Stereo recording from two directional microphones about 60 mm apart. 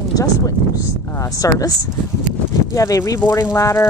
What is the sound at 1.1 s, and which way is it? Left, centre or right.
Speech, left.